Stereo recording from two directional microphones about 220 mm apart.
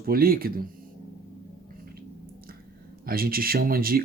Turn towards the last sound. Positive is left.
turn(degrees=-40)  # may be behind; listen again after turning